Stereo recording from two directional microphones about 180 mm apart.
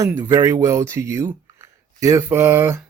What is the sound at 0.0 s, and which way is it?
Speech, 15° right (ahead or behind).